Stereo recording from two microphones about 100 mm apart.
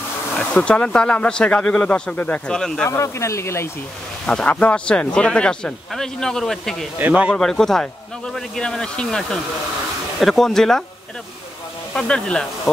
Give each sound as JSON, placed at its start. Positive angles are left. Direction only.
{"t": 0.4, "sound": "speech", "side_deg": 10}
{"t": 2.9, "sound": "speech", "side_deg": 30}
{"t": 4.3, "sound": "speech", "side_deg": 10}
{"t": 7.0, "sound": "speech", "side_deg": -15}
{"t": 7.3, "sound": "speech", "side_deg": 5}
{"t": 11.9, "sound": "speech", "side_deg": 10}